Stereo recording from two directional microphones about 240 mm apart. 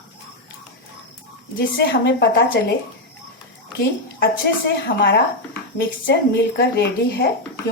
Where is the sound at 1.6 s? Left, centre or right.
Left.